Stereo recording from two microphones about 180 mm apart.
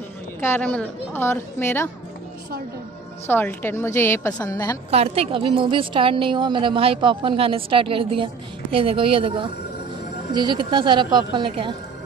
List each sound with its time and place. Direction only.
0.4 s a woman's voice: 10° left (ahead or behind)
3.3 s a woman's voice: 10° left (ahead or behind)
4.9 s a woman's voice: 35° right (ahead or behind)